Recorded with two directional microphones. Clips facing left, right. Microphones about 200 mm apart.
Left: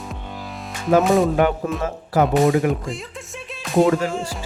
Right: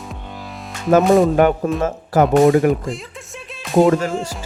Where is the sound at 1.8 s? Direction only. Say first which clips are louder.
Right 2 dB; 45° right (ahead or behind).